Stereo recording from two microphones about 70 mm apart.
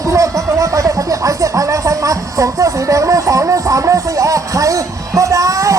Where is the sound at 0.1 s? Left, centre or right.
Right.